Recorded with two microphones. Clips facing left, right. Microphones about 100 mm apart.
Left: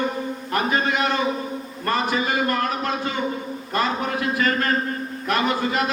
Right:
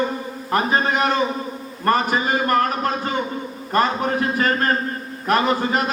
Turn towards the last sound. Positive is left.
turn(degrees=-40)  # may be behind; listen again after turning